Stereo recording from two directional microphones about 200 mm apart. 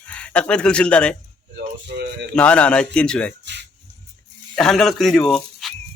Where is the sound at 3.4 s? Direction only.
60° right (ahead or behind).